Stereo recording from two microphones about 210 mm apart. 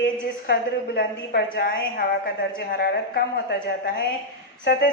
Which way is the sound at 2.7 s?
45° left (ahead or behind).